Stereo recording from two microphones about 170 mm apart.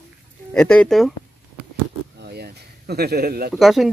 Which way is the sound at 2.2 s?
70° right (ahead or behind).